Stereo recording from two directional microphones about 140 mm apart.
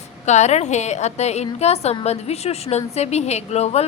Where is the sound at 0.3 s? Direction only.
55° left (ahead or behind).